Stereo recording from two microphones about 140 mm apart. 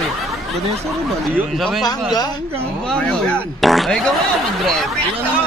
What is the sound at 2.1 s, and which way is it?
Speech, 30° left (ahead or behind).